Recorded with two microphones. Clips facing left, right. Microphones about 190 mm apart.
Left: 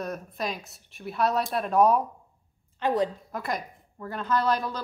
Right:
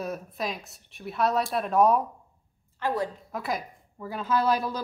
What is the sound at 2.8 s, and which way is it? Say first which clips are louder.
Speech: left 3 dB; 20° left (ahead or behind).